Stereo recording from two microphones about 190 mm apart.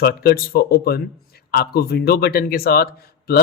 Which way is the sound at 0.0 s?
55° left (ahead or behind).